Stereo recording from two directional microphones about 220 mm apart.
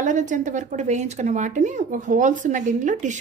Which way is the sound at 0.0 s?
35° right (ahead or behind).